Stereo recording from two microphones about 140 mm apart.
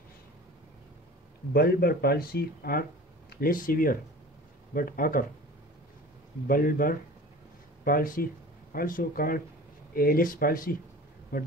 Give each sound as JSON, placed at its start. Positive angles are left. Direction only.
{"t": 1.5, "sound": "speech", "side_deg": 90}
{"t": 6.4, "sound": "speech", "side_deg": 90}